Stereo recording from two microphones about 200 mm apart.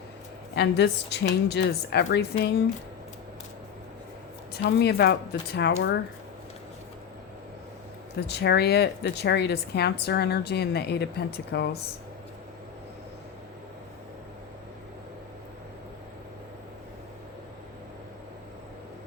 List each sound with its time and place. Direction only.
0.5 s a woman's voice: 55° left (ahead or behind)
4.5 s a woman's voice: 55° left (ahead or behind)
8.3 s a woman's voice: 55° left (ahead or behind)